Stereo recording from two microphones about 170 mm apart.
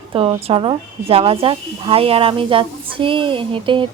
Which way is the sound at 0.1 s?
35° right (ahead or behind).